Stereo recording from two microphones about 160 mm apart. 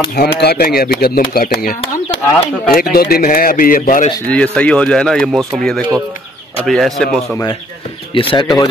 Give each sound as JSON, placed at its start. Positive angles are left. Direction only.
{"t": 0.4, "sound": "speech", "side_deg": 75}
{"t": 1.8, "sound": "speech", "side_deg": 35}
{"t": 2.7, "sound": "speech", "side_deg": 70}
{"t": 4.3, "sound": "speech", "side_deg": 5}
{"t": 8.1, "sound": "speech", "side_deg": 30}